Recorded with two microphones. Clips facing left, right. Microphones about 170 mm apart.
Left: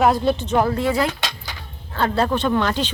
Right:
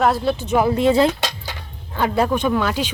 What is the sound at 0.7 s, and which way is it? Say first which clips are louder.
Speech: right 5 dB; 25° right (ahead or behind).